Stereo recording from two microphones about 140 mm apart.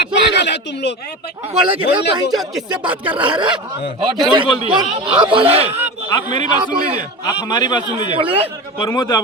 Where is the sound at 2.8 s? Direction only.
10° right (ahead or behind).